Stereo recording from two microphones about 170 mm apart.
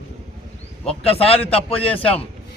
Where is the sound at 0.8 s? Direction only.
35° left (ahead or behind).